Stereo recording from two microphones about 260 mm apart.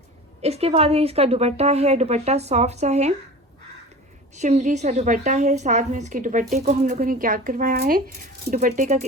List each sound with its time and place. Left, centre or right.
0.4 s a woman's voice: right
4.4 s a woman's voice: right